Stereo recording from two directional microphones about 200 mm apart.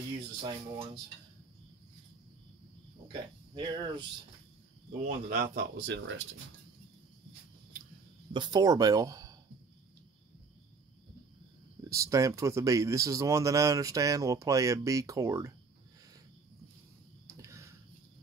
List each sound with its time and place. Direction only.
0.4 s speech: 25° right (ahead or behind)
3.1 s speech: 20° right (ahead or behind)
5.0 s speech: 45° right (ahead or behind); by 6.2 s 60° right (ahead or behind)
8.3 s speech: 20° right (ahead or behind)
11.9 s speech: 15° right (ahead or behind)
17.3 s a sound: 15° right (ahead or behind)